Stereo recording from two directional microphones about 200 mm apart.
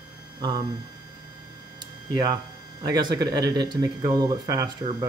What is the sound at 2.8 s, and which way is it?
Speech, 20° right (ahead or behind).